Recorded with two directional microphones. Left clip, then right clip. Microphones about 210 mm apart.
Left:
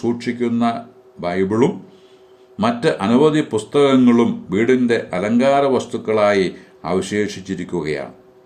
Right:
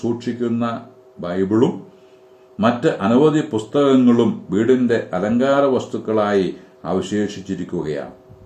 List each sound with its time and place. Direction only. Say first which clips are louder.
0.2 s speech: left 2 dB; 40° left (ahead or behind)